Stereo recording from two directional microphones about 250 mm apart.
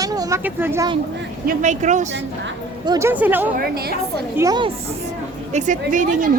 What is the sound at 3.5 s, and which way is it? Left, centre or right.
Speech, right.